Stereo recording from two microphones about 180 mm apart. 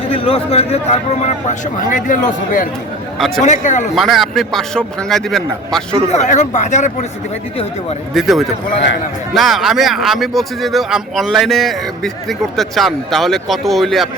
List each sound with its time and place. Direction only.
0.1 s a man's voice: 35° left (ahead or behind)
3.2 s speech: centre (ahead or behind)
3.4 s speech: 40° left (ahead or behind)
3.9 s speech: centre (ahead or behind)
6.1 s a man's voice: 40° left (ahead or behind)
8.1 s speech: centre (ahead or behind)